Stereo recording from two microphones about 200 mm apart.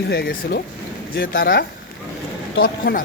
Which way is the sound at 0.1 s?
50° left (ahead or behind).